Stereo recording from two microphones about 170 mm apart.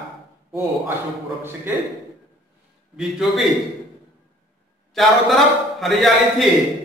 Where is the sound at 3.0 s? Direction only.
Centre (ahead or behind).